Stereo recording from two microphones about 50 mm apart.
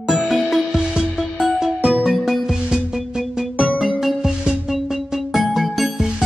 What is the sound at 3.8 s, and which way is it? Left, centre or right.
Music, centre.